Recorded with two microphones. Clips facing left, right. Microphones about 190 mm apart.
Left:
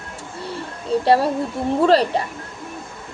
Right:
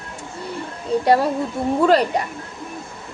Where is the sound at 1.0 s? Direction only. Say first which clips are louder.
Even; 30° left (ahead or behind).